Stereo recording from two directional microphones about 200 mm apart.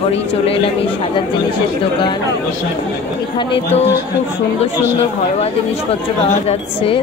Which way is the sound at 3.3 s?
25° left (ahead or behind).